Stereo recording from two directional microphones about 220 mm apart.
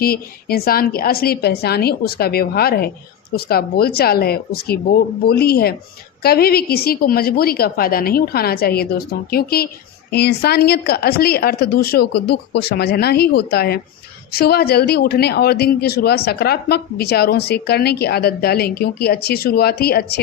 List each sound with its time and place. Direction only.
0.0 s speech: 45° left (ahead or behind)